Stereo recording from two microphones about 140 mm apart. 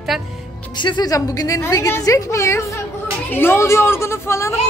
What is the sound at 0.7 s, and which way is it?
A woman's voice, 35° left (ahead or behind).